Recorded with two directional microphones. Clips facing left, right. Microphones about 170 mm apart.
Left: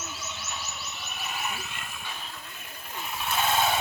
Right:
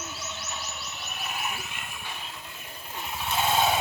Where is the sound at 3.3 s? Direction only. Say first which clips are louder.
Right 1 dB; 15° right (ahead or behind).